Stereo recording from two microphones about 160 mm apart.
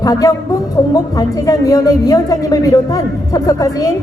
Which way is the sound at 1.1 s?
20° left (ahead or behind).